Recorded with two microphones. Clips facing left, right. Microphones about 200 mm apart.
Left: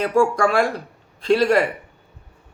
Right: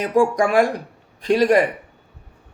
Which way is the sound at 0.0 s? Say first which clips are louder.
Even; 15° right (ahead or behind).